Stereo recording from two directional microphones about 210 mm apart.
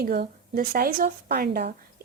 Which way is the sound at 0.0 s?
45° right (ahead or behind).